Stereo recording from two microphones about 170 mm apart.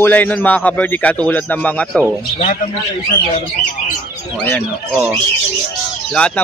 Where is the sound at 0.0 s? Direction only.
10° left (ahead or behind).